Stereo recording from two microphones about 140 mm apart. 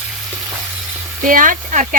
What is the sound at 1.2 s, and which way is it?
Speech, 75° right (ahead or behind).